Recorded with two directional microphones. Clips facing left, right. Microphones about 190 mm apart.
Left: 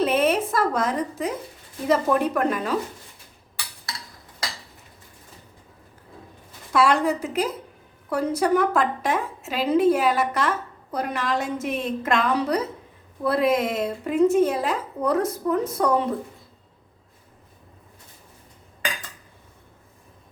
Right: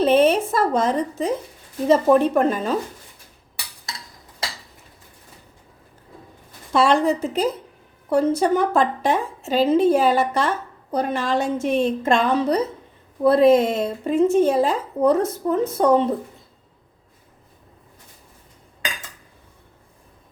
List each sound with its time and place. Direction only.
0.0 s a sound: 30° right (ahead or behind)
1.9 s a woman's voice: 25° right (ahead or behind)
6.7 s a woman's voice: 25° right (ahead or behind)